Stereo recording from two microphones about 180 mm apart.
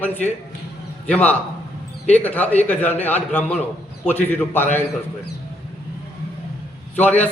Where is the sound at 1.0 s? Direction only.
10° left (ahead or behind).